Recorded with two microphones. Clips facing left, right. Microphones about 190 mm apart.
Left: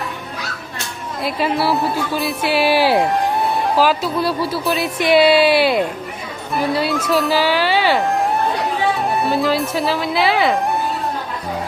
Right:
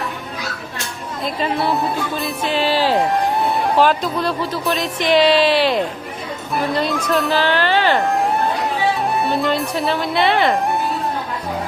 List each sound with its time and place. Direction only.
1.2 s speech: 5° left (ahead or behind)
3.0 s speech: centre (ahead or behind)